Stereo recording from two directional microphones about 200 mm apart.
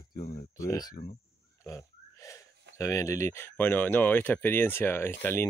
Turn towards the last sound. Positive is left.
turn(degrees=10)  # may be behind; listen again after turning